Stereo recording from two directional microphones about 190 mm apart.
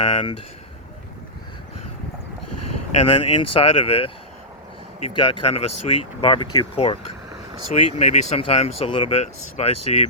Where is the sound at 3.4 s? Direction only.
30° left (ahead or behind).